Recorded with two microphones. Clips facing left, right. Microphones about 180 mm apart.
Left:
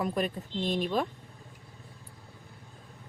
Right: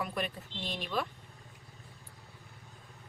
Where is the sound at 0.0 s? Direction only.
40° left (ahead or behind).